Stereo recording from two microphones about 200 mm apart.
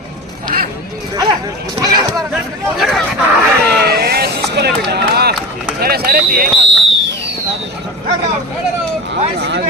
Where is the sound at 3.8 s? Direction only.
50° right (ahead or behind).